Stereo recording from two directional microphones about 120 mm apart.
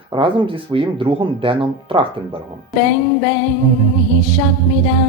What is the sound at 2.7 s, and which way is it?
Music, centre (ahead or behind).